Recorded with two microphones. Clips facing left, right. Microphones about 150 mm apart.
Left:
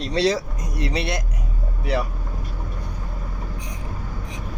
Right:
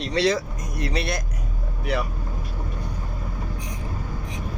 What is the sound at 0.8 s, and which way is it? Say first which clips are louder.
Speech: left 1 dB; 25° left (ahead or behind).